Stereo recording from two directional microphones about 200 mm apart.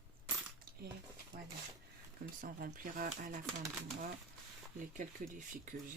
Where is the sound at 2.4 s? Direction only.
45° right (ahead or behind).